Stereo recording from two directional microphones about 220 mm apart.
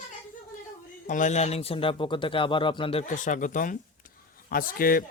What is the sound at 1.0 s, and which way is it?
Speech, 35° left (ahead or behind).